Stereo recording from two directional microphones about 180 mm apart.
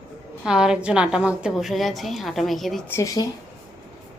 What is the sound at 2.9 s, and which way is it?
Speech, 15° left (ahead or behind).